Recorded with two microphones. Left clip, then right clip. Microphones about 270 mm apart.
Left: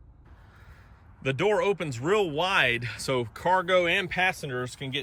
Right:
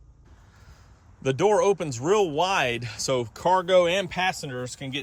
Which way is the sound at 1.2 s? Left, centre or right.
Centre.